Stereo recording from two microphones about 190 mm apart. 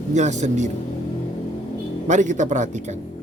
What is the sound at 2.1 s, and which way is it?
Speech, 40° right (ahead or behind).